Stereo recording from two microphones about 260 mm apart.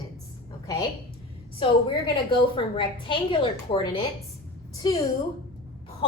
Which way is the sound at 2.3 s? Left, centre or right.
Centre.